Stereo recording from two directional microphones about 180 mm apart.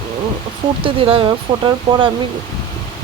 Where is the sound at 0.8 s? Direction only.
30° right (ahead or behind).